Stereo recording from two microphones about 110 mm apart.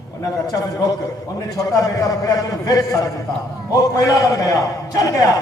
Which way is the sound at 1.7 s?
30° left (ahead or behind).